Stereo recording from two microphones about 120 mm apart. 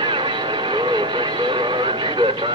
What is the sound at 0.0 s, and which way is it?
Vehicle, 40° right (ahead or behind).